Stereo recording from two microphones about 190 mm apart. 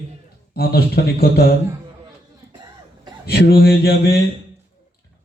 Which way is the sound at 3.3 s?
55° left (ahead or behind).